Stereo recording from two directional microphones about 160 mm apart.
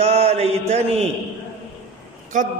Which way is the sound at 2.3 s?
55° right (ahead or behind).